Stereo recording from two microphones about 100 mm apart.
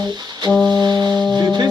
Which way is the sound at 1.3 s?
40° right (ahead or behind).